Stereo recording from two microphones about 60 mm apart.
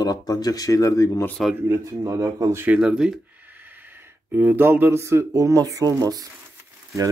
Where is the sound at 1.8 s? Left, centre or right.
Right.